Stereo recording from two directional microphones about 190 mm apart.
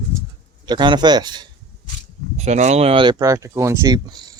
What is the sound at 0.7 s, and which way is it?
Speech, 25° right (ahead or behind).